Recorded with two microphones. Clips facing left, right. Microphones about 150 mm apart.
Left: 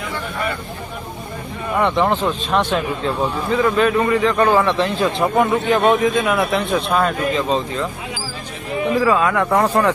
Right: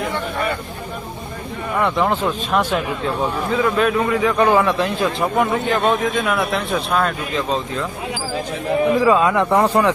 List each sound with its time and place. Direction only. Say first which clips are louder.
1.8 s a man's voice: left 1 dB; centre (ahead or behind)
9.0 s speech: right 2 dB; 20° right (ahead or behind)
9.5 s a man's voice: right 1 dB; 10° right (ahead or behind)